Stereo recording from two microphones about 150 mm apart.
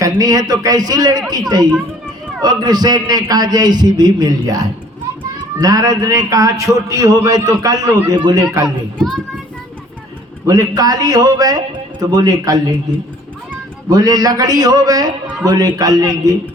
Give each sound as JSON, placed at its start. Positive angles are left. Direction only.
{"t": 0.0, "sound": "a man's voice", "side_deg": -25}
{"t": 8.6, "sound": "a child's voice", "side_deg": 0}
{"t": 10.4, "sound": "a man's voice", "side_deg": -25}
{"t": 13.9, "sound": "a man's voice", "side_deg": -25}